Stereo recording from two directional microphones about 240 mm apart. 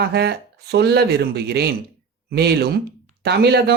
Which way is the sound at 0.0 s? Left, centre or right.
Right.